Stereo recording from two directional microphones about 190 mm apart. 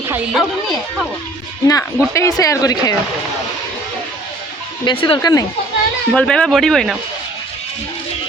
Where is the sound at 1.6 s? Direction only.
15° left (ahead or behind).